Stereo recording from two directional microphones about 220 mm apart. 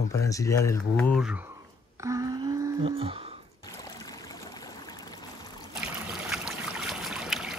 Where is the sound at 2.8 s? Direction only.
25° right (ahead or behind).